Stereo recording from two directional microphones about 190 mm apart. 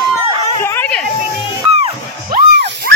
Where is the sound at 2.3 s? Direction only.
60° right (ahead or behind).